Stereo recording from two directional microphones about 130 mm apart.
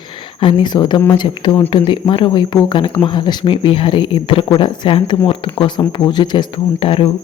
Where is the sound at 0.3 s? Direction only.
35° left (ahead or behind).